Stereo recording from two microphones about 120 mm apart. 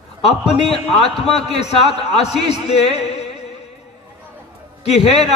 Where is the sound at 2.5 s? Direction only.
60° left (ahead or behind).